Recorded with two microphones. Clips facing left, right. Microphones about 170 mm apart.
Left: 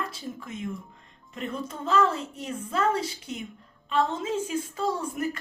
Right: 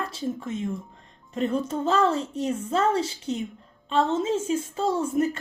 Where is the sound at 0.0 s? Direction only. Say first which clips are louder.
Right 5 dB; 30° right (ahead or behind).